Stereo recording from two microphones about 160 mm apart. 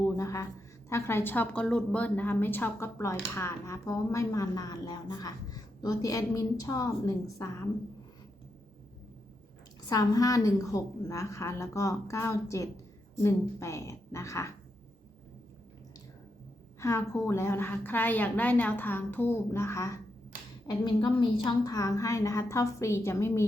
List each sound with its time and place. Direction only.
0.0 s a woman's voice: 20° left (ahead or behind)
9.9 s speech: 20° left (ahead or behind)
16.8 s a woman's voice: 20° left (ahead or behind)
20.7 s speech: 30° left (ahead or behind)